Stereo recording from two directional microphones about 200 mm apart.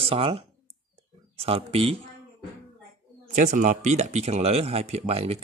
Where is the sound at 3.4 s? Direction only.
35° right (ahead or behind).